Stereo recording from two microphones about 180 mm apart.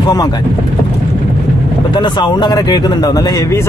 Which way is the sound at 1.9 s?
25° left (ahead or behind).